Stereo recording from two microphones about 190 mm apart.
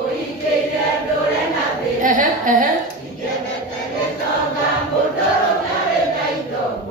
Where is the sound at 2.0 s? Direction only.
45° right (ahead or behind).